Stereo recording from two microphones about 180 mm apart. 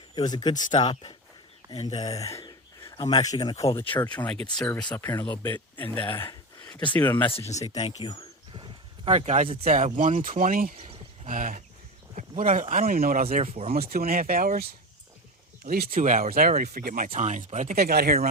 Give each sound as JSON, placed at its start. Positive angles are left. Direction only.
{"t": 0.2, "sound": "speech", "side_deg": 25}
{"t": 0.5, "sound": "speech", "side_deg": 45}
{"t": 0.8, "sound": "speech", "side_deg": 30}
{"t": 2.0, "sound": "speech", "side_deg": 20}
{"t": 3.8, "sound": "speech", "side_deg": 10}
{"t": 7.3, "sound": "speech", "side_deg": 35}
{"t": 8.0, "sound": "speech", "side_deg": 20}
{"t": 9.0, "sound": "speech", "side_deg": -40}
{"t": 10.8, "sound": "a sound", "side_deg": -30}
{"t": 11.3, "sound": "speech", "side_deg": -50}
{"t": 13.3, "sound": "speech", "side_deg": -35}
{"t": 13.7, "sound": "speech", "side_deg": -55}
{"t": 17.1, "sound": "speech", "side_deg": -40}
{"t": 17.7, "sound": "speech", "side_deg": -55}